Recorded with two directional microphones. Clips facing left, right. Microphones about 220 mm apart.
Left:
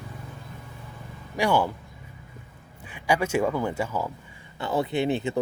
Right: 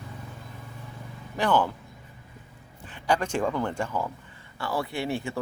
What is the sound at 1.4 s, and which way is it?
Speech, 10° left (ahead or behind).